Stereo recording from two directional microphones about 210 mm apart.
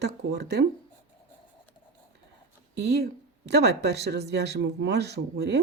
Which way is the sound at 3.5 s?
50° right (ahead or behind).